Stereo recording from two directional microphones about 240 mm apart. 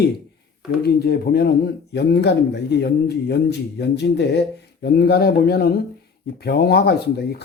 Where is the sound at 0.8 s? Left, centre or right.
Left.